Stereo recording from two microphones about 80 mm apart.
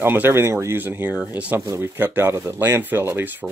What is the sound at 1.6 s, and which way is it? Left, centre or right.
Speech, right.